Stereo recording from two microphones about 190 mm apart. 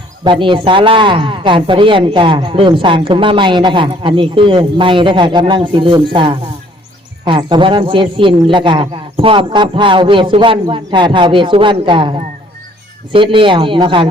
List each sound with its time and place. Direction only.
0.3 s speech: 25° right (ahead or behind)